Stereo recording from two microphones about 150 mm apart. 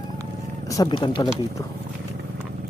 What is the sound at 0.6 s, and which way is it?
Speech, 20° left (ahead or behind).